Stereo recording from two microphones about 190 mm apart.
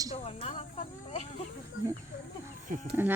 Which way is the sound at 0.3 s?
35° left (ahead or behind).